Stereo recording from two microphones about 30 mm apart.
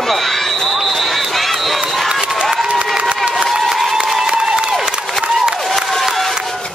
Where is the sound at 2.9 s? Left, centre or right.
Right.